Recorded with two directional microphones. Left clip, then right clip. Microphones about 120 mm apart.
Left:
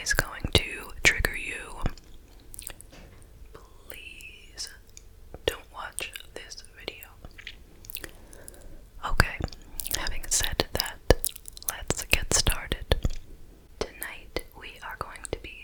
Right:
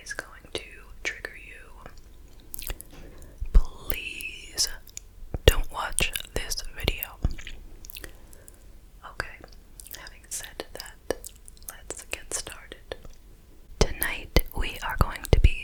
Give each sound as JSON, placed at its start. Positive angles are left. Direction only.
{"t": 0.0, "sound": "whispering", "side_deg": 35}
{"t": 2.6, "sound": "chewing", "side_deg": -20}
{"t": 3.5, "sound": "whispering", "side_deg": -35}
{"t": 7.4, "sound": "chewing", "side_deg": 0}
{"t": 9.0, "sound": "whispering", "side_deg": 40}
{"t": 13.7, "sound": "whispering", "side_deg": -25}